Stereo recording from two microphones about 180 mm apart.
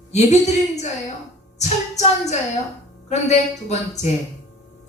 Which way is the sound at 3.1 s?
40° left (ahead or behind).